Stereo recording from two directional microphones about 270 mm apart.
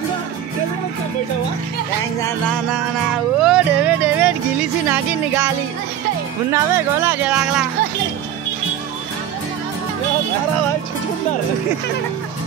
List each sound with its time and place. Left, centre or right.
3.3 s music: centre
6.5 s speech: centre